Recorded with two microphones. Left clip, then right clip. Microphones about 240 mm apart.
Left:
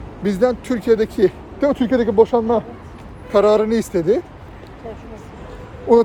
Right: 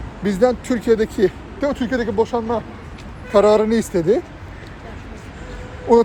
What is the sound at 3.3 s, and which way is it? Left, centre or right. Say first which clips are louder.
Speech: even; centre.